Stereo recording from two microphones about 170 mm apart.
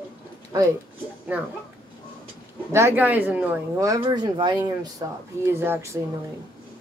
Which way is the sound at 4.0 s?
25° right (ahead or behind).